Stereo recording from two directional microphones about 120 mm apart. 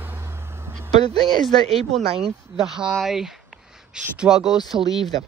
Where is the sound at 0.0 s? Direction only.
20° right (ahead or behind).